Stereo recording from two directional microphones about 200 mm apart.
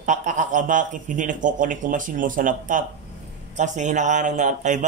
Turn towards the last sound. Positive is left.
turn(degrees=-35)  # may be behind; listen again after turning